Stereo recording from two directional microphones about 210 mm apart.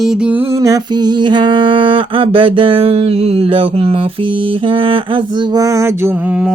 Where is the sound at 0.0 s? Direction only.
5° right (ahead or behind).